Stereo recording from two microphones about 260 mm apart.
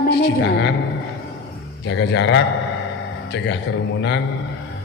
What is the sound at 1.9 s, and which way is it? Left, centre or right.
Speech, left.